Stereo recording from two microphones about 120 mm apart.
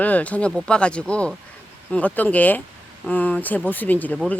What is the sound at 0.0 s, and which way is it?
A woman's voice, 15° left (ahead or behind).